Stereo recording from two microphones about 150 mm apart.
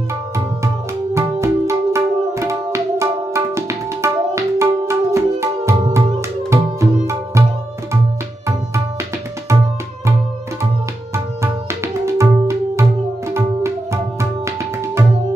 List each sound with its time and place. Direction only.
1.1 s tabla: 20° right (ahead or behind)
6.5 s music: 20° right (ahead or behind)
11.8 s music: 20° right (ahead or behind)
13.3 s tabla: 20° right (ahead or behind)